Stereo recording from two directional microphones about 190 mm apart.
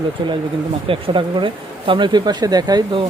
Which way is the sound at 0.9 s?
30° right (ahead or behind).